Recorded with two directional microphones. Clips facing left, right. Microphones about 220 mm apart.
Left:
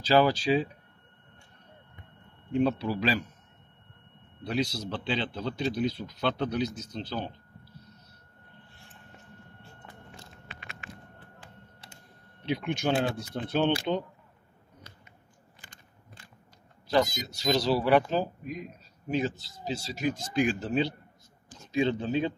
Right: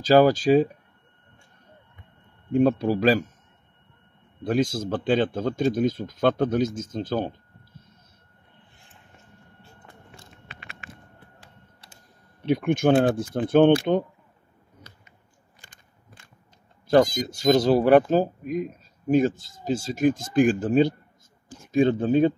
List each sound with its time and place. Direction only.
0.0 s speech: 45° right (ahead or behind)
2.5 s speech: 45° right (ahead or behind)
4.5 s speech: 50° right (ahead or behind)
12.4 s speech: 50° right (ahead or behind)
16.8 s speech: 50° right (ahead or behind)